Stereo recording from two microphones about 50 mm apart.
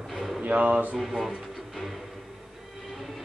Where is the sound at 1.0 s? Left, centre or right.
Centre.